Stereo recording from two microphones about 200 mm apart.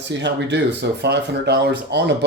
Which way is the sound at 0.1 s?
60° right (ahead or behind).